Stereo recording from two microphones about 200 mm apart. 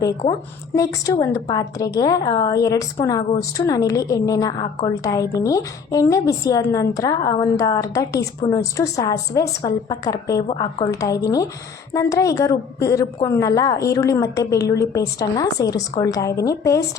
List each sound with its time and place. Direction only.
0.8 s a woman's voice: 15° left (ahead or behind)